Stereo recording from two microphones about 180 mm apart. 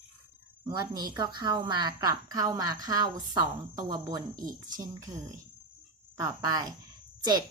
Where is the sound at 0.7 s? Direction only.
25° right (ahead or behind).